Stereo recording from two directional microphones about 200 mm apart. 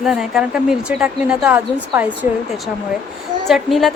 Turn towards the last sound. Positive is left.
turn(degrees=0)  # may be behind; listen again after turning